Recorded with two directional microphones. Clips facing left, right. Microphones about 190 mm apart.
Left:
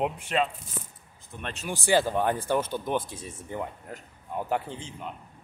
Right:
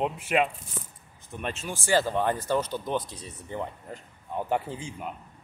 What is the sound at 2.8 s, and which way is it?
Speech, 50° left (ahead or behind).